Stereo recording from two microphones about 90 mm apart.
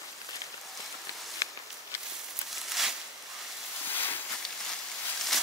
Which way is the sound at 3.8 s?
20° left (ahead or behind).